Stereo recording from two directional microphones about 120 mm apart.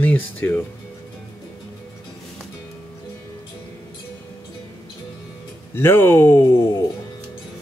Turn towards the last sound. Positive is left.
turn(degrees=20)  # may be behind; listen again after turning